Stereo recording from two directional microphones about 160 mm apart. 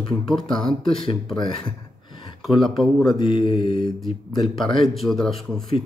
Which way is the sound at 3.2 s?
30° left (ahead or behind).